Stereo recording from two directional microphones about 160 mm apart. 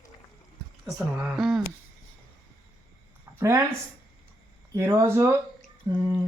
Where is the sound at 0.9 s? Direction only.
5° right (ahead or behind).